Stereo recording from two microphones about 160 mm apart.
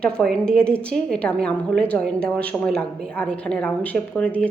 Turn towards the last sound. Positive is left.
turn(degrees=10)  # may be behind; listen again after turning